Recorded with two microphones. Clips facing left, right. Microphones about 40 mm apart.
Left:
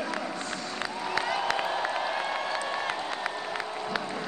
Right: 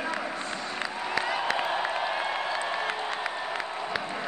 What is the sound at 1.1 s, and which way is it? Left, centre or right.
Applause, centre.